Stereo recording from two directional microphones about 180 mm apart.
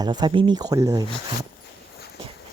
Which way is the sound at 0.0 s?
25° right (ahead or behind).